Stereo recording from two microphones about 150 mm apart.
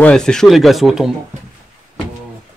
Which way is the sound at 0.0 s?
5° left (ahead or behind).